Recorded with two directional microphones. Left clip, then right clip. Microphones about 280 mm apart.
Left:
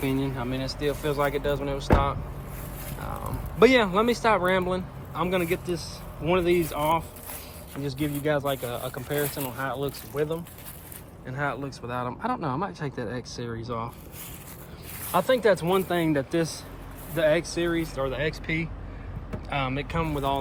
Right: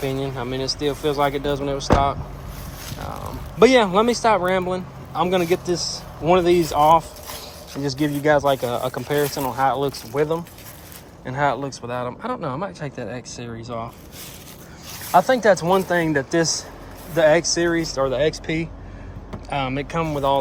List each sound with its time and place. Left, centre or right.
0.0 s speech: centre
3.6 s speech: centre
8.2 s speech: centre
15.1 s speech: centre